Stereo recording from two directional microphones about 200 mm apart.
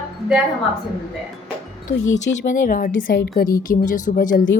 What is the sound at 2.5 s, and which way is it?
A woman's voice, 40° left (ahead or behind).